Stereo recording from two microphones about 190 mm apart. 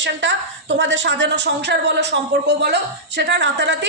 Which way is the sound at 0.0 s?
75° right (ahead or behind).